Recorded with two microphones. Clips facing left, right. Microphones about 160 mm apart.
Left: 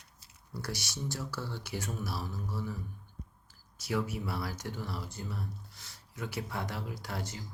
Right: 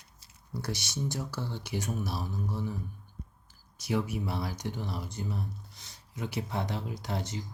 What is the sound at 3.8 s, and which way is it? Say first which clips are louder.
Speech: right 3 dB; 20° right (ahead or behind).